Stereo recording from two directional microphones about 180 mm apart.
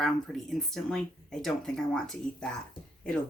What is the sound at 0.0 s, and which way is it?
Speech, centre (ahead or behind).